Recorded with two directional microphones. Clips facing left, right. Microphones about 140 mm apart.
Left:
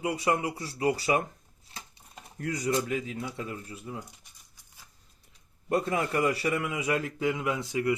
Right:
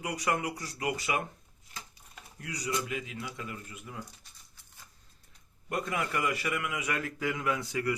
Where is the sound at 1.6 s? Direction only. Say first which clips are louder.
Left 1 dB; 30° left (ahead or behind).